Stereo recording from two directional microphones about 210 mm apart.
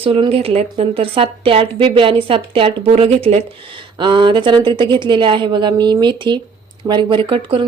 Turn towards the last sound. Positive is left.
turn(degrees=-25)  # may be behind; listen again after turning